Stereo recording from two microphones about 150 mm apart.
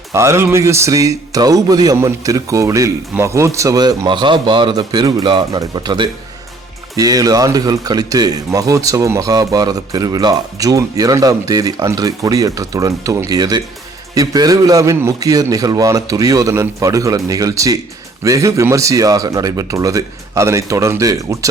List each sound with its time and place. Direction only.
0.1 s speech: 20° right (ahead or behind)